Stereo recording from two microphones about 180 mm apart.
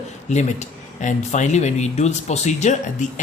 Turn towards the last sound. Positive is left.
turn(degrees=40)  # may be behind; listen again after turning